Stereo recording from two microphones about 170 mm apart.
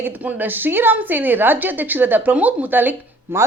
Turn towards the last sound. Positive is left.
turn(degrees=-15)  # may be behind; listen again after turning